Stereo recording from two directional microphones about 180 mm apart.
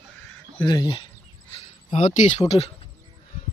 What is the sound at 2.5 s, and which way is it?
Speech, 30° left (ahead or behind).